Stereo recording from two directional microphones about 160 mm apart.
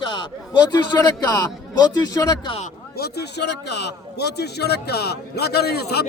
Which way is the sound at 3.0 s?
90° left.